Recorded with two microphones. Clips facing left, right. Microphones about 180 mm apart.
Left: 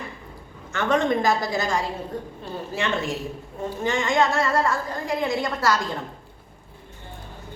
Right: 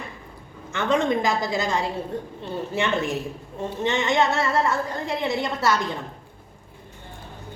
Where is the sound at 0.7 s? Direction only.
20° right (ahead or behind).